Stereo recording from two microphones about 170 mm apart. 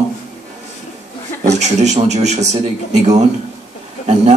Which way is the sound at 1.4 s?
45° right (ahead or behind).